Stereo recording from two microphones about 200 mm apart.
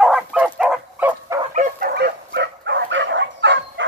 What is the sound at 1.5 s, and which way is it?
Dog, 50° right (ahead or behind).